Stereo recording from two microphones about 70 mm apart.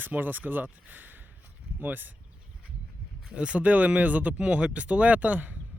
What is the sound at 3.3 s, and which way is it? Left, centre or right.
Speech, centre.